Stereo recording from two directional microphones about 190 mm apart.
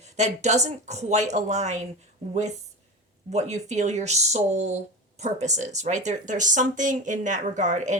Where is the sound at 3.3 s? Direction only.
35° right (ahead or behind).